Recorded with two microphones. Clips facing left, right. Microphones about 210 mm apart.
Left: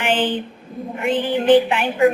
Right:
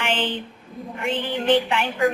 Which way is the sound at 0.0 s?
15° left (ahead or behind).